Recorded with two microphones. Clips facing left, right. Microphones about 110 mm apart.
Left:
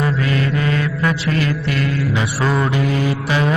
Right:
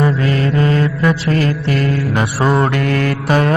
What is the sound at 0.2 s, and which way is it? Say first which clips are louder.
Mantra: right 4 dB; 35° right (ahead or behind).